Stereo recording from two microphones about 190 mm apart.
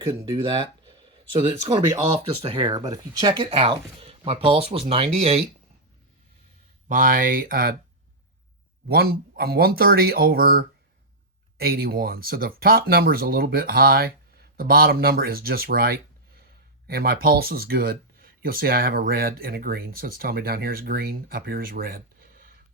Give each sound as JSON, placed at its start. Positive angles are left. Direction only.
{"t": 0.0, "sound": "speech", "side_deg": -25}
{"t": 6.8, "sound": "speech", "side_deg": -45}
{"t": 8.9, "sound": "speech", "side_deg": -55}